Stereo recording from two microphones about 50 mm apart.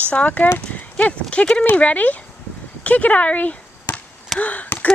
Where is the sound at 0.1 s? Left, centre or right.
Left.